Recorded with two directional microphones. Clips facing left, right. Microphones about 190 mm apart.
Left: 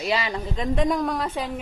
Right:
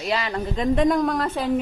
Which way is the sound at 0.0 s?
Centre (ahead or behind).